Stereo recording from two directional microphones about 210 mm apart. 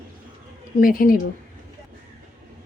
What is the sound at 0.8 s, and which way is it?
Speech, 40° left (ahead or behind).